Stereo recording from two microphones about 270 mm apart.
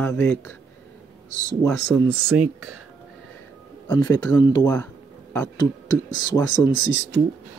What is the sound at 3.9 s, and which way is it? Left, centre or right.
Speech, centre.